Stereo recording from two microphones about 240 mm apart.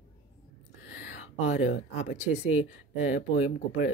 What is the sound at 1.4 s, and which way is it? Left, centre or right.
Speech, left.